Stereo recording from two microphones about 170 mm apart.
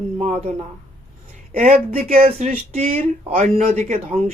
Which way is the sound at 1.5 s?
45° right (ahead or behind).